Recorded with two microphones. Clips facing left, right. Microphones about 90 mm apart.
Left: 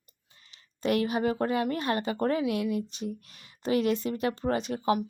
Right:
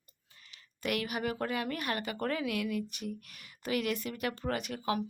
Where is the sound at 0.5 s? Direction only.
30° left (ahead or behind).